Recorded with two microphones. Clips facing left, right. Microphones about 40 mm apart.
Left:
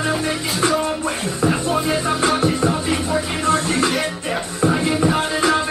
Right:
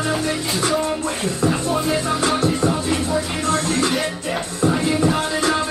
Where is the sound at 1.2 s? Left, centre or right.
Centre.